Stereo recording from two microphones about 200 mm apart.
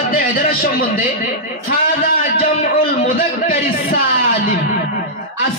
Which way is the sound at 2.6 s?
45° left (ahead or behind).